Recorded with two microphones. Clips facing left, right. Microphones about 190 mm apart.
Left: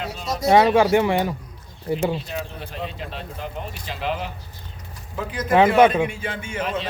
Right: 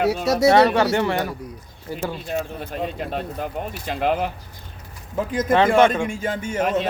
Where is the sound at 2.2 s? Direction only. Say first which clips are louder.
Right 4 dB; 45° right (ahead or behind).